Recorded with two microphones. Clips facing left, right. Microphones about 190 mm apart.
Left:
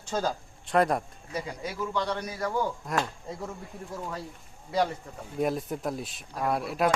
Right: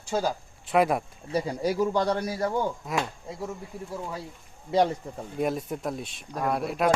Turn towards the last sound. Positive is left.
turn(degrees=0)  # may be behind; listen again after turning